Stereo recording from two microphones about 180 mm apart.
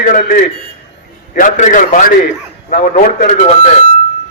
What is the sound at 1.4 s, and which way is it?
A man's voice, 45° left (ahead or behind).